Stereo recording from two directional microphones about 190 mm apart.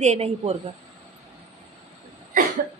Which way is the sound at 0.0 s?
35° right (ahead or behind).